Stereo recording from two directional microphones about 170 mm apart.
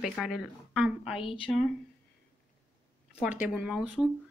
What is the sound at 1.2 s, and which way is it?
Speech, 30° left (ahead or behind).